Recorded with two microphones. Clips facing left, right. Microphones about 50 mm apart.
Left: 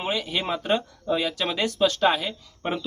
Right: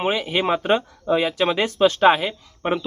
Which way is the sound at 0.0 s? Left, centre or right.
Right.